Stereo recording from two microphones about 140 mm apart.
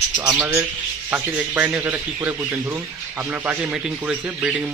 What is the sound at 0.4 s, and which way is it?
Speech, 20° right (ahead or behind).